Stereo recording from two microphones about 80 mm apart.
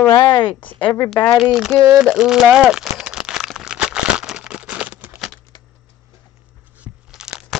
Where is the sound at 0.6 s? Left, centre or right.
Left.